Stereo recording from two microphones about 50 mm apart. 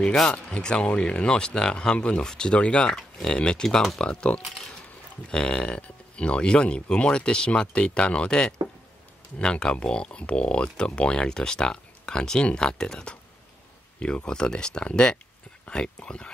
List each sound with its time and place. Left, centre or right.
0.1 s speech: centre
4.0 s speech: left